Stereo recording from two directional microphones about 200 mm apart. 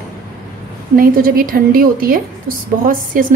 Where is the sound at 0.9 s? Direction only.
45° right (ahead or behind).